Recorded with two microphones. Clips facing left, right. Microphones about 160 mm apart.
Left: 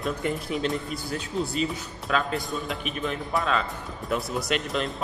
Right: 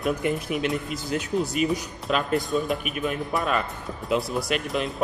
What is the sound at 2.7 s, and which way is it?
Speech, 10° right (ahead or behind).